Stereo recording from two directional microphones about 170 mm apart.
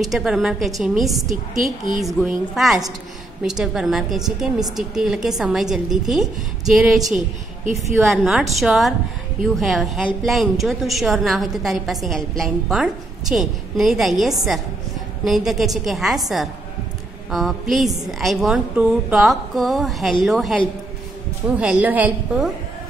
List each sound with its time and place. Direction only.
0.0 s a woman's voice: 5° right (ahead or behind)
1.3 s a woman's voice: 50° right (ahead or behind)
2.5 s a woman's voice: centre (ahead or behind)
8.1 s a woman's voice: centre (ahead or behind)